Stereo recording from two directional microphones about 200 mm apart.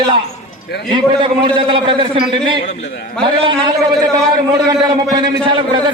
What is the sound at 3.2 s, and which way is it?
A man's voice, 25° right (ahead or behind).